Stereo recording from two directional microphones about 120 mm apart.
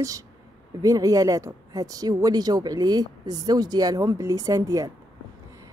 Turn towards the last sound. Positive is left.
turn(degrees=-30)  # may be behind; listen again after turning